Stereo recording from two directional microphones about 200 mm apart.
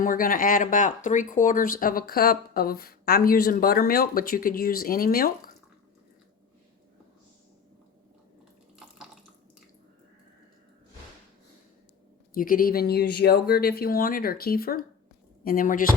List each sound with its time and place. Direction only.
0.0 s speech: 45° left (ahead or behind)
12.3 s speech: 45° left (ahead or behind)